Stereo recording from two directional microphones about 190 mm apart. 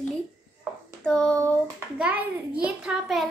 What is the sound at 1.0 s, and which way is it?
Speech, 5° left (ahead or behind).